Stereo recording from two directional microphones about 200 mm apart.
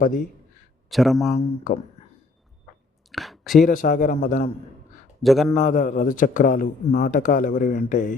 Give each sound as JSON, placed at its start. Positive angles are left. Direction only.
{"t": 0.0, "sound": "speech", "side_deg": 40}
{"t": 0.9, "sound": "speech", "side_deg": 0}
{"t": 1.4, "sound": "speech", "side_deg": 35}
{"t": 3.1, "sound": "a sound", "side_deg": 0}
{"t": 3.6, "sound": "speech", "side_deg": 40}
{"t": 5.2, "sound": "speech", "side_deg": 0}
{"t": 5.5, "sound": "speech", "side_deg": 40}